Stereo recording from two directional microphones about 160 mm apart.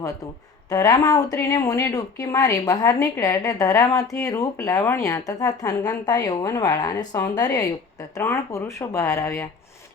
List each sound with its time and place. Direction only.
0.7 s speech: 25° left (ahead or behind)